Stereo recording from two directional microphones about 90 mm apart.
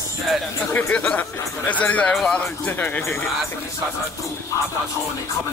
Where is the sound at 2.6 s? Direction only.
20° left (ahead or behind).